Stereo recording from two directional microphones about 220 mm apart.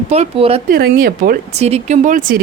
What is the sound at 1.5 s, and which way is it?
Speech, 30° right (ahead or behind).